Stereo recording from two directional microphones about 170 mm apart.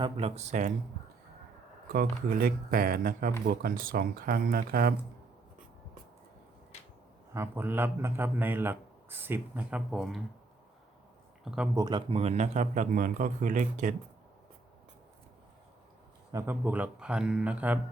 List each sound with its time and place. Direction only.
0.0 s speech: 35° right (ahead or behind)
1.9 s speech: 60° right (ahead or behind)
7.3 s speech: 15° right (ahead or behind)
11.7 s speech: 25° right (ahead or behind)
12.2 s speech: 40° right (ahead or behind)
16.3 s speech: 15° right (ahead or behind)